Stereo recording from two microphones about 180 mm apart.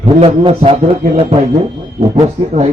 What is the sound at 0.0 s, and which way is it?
A man's voice, 30° right (ahead or behind).